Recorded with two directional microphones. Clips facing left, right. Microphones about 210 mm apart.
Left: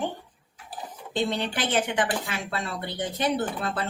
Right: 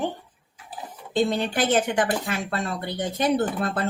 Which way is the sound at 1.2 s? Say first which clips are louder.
Right 5 dB; 45° right (ahead or behind).